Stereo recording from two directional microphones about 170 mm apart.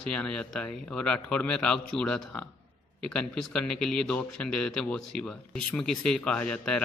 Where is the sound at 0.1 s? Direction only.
5° left (ahead or behind).